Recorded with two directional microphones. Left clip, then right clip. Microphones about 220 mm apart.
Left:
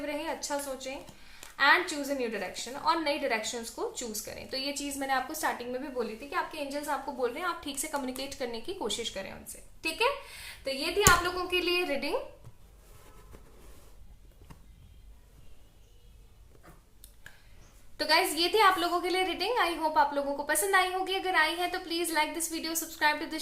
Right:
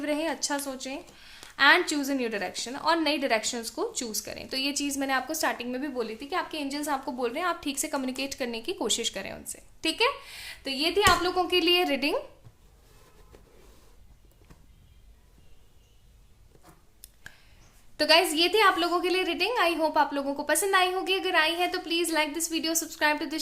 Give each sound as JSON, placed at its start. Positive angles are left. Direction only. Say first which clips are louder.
{"t": 0.0, "sound": "a woman's voice", "louder": "right 5 dB", "side_deg": -45}
{"t": 17.9, "sound": "a woman's voice", "louder": "right 5 dB", "side_deg": -40}